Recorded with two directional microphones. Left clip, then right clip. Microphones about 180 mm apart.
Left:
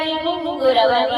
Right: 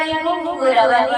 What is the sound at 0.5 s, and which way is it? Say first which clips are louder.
Music: right 1 dB; 10° left (ahead or behind).